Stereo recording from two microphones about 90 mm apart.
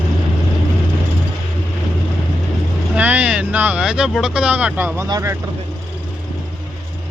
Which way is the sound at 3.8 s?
5° right (ahead or behind).